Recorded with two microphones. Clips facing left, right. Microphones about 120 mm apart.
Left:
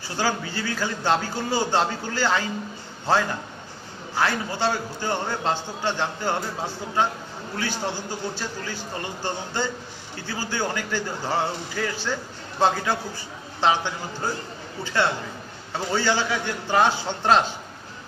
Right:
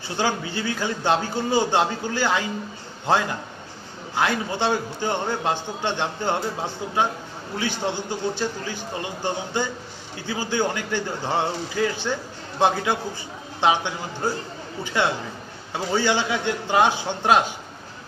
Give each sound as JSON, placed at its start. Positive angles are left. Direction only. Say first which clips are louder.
{"t": 0.2, "sound": "a man's voice", "louder": "right 1 dB", "side_deg": -20}